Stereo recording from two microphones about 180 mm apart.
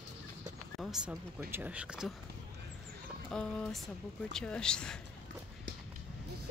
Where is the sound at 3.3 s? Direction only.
5° left (ahead or behind).